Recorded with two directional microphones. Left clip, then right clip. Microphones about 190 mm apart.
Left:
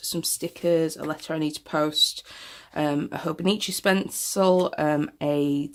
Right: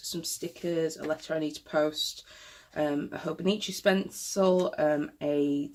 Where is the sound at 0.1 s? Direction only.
50° left (ahead or behind).